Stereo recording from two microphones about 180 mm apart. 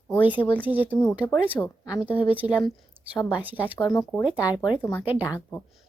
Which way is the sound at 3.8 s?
20° left (ahead or behind).